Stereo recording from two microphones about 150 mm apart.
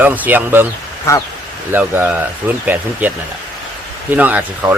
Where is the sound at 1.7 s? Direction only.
10° right (ahead or behind).